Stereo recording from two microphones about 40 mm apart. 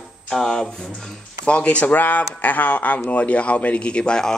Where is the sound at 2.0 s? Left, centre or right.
Left.